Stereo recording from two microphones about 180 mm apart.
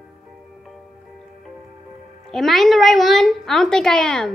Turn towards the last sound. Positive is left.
turn(degrees=5)  # may be behind; listen again after turning